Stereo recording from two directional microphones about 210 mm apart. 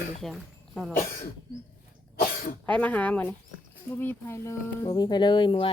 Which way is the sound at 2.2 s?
40° left (ahead or behind).